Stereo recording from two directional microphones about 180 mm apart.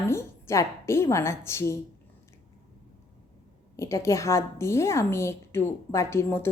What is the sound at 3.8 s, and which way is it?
A woman's voice, 15° left (ahead or behind).